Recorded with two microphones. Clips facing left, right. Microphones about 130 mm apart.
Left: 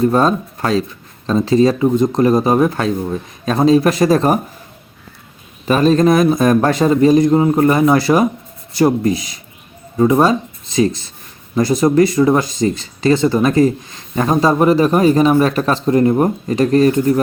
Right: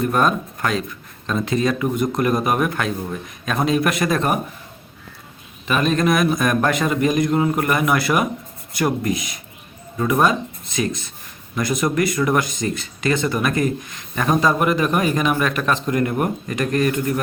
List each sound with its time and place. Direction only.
0.0 s a man's voice: 30° left (ahead or behind)
5.6 s a man's voice: 35° left (ahead or behind)